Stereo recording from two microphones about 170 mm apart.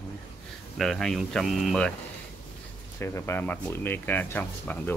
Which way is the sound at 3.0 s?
15° left (ahead or behind).